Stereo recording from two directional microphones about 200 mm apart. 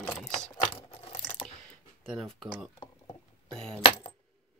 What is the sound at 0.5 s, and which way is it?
Keys jangling, 20° left (ahead or behind).